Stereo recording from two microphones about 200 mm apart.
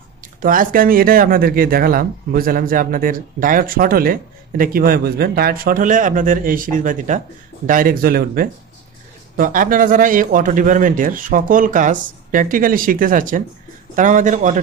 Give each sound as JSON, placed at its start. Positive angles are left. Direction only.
{"t": 0.4, "sound": "a man's voice", "side_deg": -45}